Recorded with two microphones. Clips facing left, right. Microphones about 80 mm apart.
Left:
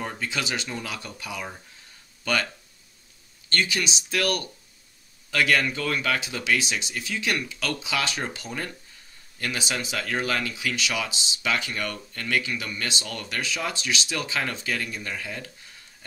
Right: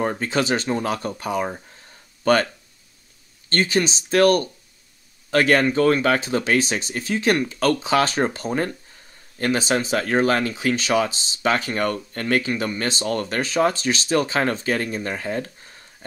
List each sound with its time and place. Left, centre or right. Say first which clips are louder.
0.0 s speech: right 8 dB; right
3.4 s speech: right 6 dB; right